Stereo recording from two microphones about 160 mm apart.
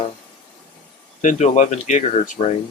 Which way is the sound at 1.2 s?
50° left (ahead or behind).